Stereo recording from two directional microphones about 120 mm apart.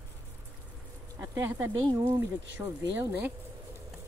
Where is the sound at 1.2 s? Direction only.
20° right (ahead or behind).